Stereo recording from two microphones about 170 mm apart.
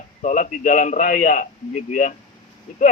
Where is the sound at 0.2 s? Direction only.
45° left (ahead or behind).